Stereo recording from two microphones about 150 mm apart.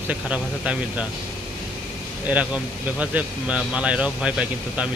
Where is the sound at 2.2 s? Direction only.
10° right (ahead or behind).